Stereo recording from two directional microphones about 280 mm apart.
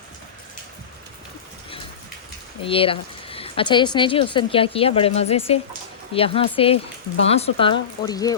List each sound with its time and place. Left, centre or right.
2.6 s speech: centre